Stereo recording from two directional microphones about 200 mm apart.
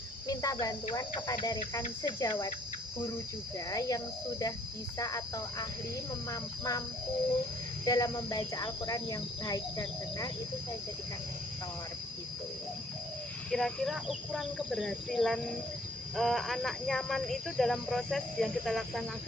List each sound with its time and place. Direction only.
0.3 s speech: 20° left (ahead or behind)
0.9 s cricket: 20° left (ahead or behind)
3.7 s cricket: 15° left (ahead or behind)
7.9 s cricket: 20° left (ahead or behind)
13.5 s cricket: centre (ahead or behind)